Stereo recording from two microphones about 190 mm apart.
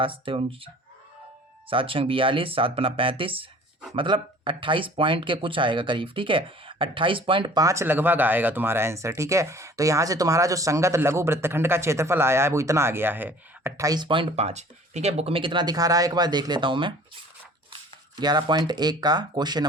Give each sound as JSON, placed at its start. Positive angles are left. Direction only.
{"t": 0.0, "sound": "speech", "side_deg": -30}
{"t": 1.7, "sound": "speech", "side_deg": -30}
{"t": 18.2, "sound": "speech", "side_deg": -20}